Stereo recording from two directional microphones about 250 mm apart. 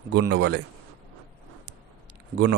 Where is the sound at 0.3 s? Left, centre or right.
Right.